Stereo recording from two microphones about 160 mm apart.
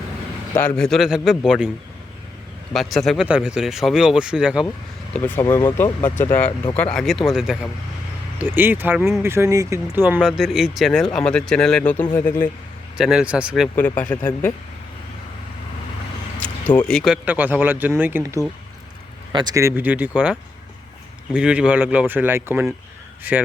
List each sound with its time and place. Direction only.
0.8 s speech: centre (ahead or behind)
2.7 s speech: centre (ahead or behind)
5.1 s speech: 10° left (ahead or behind)
5.5 s speech: 25° left (ahead or behind)
6.9 s speech: centre (ahead or behind)
8.4 s speech: 15° right (ahead or behind); by 12.5 s 15° left (ahead or behind)
13.0 s speech: 5° right (ahead or behind)
13.7 s speech: 10° left (ahead or behind)
14.1 s speech: 20° left (ahead or behind)
16.4 s speech: 10° left (ahead or behind)
17.2 s speech: 10° right (ahead or behind)
21.3 s speech: 5° right (ahead or behind)